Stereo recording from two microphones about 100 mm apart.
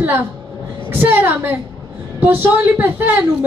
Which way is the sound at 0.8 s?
20° right (ahead or behind).